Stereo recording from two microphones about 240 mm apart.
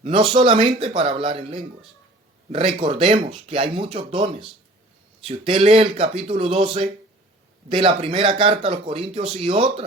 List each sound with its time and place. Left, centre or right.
0.0 s speech: right